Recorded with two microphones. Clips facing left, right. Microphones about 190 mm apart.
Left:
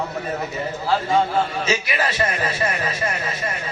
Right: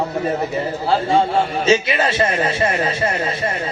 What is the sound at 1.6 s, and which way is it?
A man's voice, 30° right (ahead or behind).